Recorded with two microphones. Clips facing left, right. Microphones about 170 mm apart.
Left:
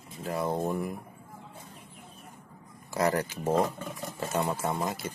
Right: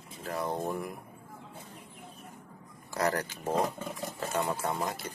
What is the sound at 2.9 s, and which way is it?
Speech, 15° left (ahead or behind).